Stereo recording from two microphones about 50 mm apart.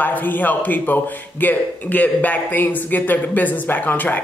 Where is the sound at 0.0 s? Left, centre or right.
Left.